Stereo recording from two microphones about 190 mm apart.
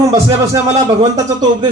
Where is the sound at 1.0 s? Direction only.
20° right (ahead or behind).